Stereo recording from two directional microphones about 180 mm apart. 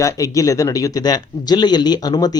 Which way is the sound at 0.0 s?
20° left (ahead or behind).